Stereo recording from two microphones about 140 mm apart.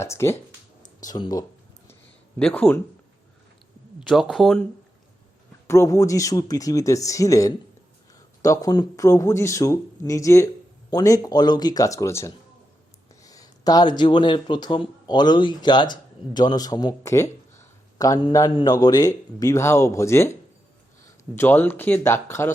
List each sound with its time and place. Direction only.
0.0 s speech: 20° left (ahead or behind)
1.0 s speech: 30° left (ahead or behind)
2.4 s speech: 10° left (ahead or behind)
4.0 s speech: centre (ahead or behind)
5.6 s speech: 20° left (ahead or behind)
21.3 s speech: 15° left (ahead or behind)